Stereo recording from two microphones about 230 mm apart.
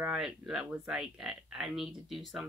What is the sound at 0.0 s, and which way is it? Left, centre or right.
Speech, centre.